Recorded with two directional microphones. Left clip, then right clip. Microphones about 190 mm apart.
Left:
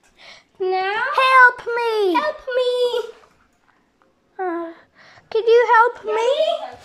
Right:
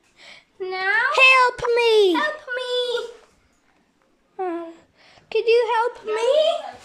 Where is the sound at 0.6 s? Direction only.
10° left (ahead or behind).